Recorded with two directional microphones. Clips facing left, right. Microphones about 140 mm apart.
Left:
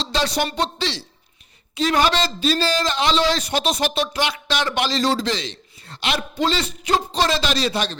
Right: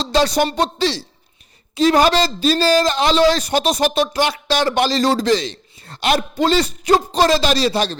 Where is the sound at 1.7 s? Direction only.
35° right (ahead or behind).